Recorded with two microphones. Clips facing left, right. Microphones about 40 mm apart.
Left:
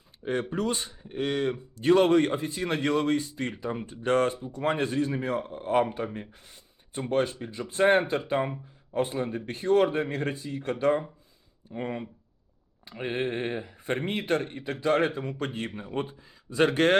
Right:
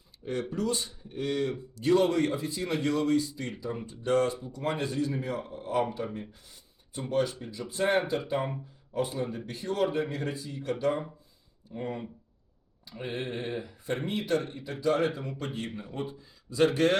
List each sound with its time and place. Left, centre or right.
0.5 s a man's voice: left
6.9 s a man's voice: left